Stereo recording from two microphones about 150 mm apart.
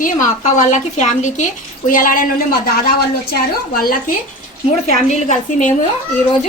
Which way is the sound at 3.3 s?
85° left.